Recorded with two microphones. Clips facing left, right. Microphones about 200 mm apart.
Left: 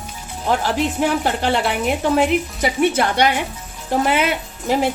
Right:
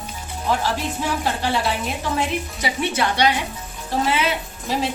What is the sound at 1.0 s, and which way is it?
A woman's voice, 55° left (ahead or behind).